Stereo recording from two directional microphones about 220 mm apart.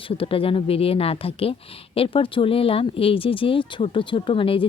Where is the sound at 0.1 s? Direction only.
25° left (ahead or behind).